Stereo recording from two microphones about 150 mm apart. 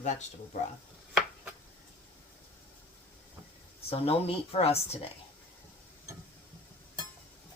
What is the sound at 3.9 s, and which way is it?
Speech, 40° left (ahead or behind).